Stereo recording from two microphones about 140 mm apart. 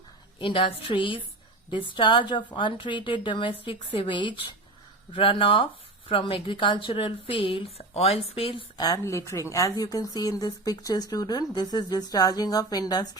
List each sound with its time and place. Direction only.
0.3 s a woman's voice: 35° left (ahead or behind)
8.8 s a woman's voice: 25° left (ahead or behind)